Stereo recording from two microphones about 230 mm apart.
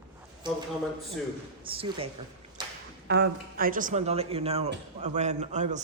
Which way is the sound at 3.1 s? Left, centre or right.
Right.